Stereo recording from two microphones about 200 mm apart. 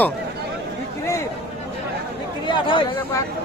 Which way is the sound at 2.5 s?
25° left (ahead or behind).